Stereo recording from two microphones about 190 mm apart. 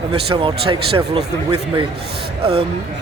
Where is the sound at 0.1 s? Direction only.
30° right (ahead or behind).